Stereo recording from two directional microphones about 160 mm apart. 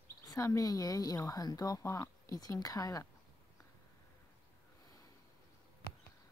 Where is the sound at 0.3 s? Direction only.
20° left (ahead or behind).